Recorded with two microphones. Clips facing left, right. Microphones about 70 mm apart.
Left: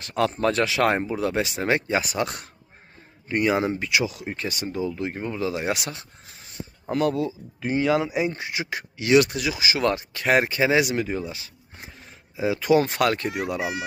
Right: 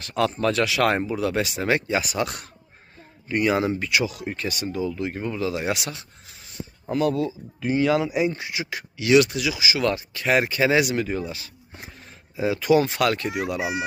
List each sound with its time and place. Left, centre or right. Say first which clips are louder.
0.0 s speech: even; left
0.9 s speech: even; centre
5.7 s speech: even; left
10.6 s speech: right 1 dB; left
12.5 s speech: even; left
13.6 s speech: right 1 dB; centre